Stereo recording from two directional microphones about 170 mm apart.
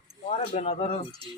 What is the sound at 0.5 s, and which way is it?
Speech, 40° left (ahead or behind).